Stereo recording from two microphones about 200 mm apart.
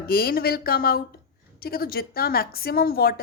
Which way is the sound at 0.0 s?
50° left (ahead or behind).